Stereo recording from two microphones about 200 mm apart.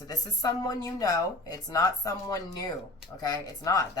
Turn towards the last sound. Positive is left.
turn(degrees=15)  # may be behind; listen again after turning